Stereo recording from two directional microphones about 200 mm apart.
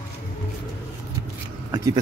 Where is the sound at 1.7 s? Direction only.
15° right (ahead or behind).